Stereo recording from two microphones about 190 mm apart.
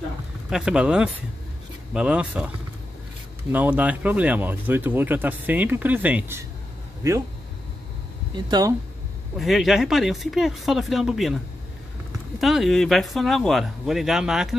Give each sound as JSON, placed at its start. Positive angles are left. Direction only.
{"t": 0.5, "sound": "speech", "side_deg": -5}
{"t": 3.5, "sound": "speech", "side_deg": -10}
{"t": 8.5, "sound": "speech", "side_deg": -20}
{"t": 9.4, "sound": "speech", "side_deg": 0}
{"t": 12.4, "sound": "speech", "side_deg": 0}